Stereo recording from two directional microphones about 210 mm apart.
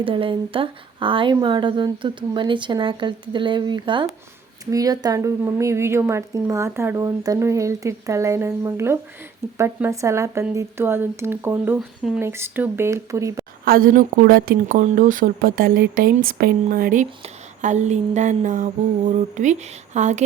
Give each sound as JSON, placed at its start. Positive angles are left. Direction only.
{"t": 0.0, "sound": "a woman's voice", "side_deg": -25}
{"t": 13.7, "sound": "speech", "side_deg": -45}